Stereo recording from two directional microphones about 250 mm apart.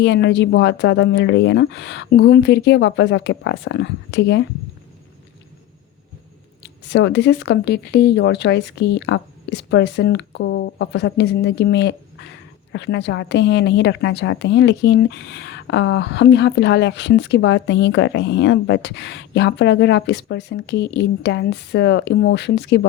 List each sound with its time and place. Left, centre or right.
0.0 s a woman's voice: left
6.6 s a woman's voice: left